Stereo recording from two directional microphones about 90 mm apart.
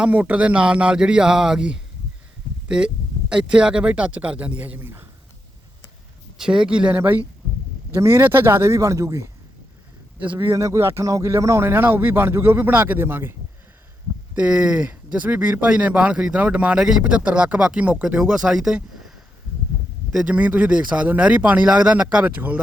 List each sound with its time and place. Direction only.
0.0 s speech: 15° right (ahead or behind)
6.3 s a man's voice: 5° right (ahead or behind); by 9.3 s 35° right (ahead or behind)
10.3 s speech: 30° right (ahead or behind)
14.3 s speech: 15° right (ahead or behind)
20.1 s speech: 15° right (ahead or behind)